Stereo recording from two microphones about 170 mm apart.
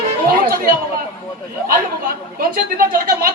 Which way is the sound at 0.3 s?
60° right (ahead or behind).